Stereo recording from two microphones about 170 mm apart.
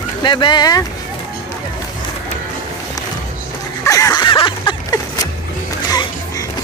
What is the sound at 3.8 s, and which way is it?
Music, 20° left (ahead or behind).